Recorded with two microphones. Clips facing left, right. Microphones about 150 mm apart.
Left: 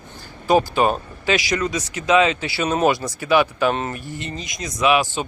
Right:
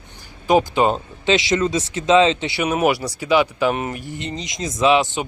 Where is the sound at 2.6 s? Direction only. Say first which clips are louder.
Even; 10° right (ahead or behind).